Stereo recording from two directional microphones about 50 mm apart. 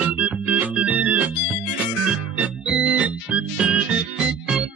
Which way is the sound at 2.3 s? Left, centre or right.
Right.